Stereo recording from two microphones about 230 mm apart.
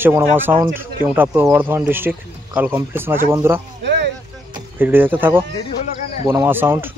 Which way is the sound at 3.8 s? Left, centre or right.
Right.